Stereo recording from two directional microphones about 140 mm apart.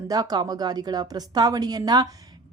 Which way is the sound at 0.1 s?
30° right (ahead or behind).